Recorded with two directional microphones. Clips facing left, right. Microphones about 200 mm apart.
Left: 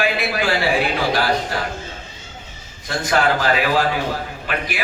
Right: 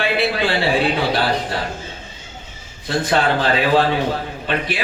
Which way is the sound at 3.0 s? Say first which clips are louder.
Left 1 dB; 30° right (ahead or behind).